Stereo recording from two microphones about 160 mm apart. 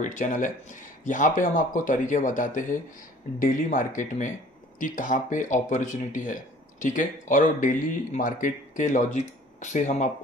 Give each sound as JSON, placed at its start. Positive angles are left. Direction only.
{"t": 0.0, "sound": "speech", "side_deg": 55}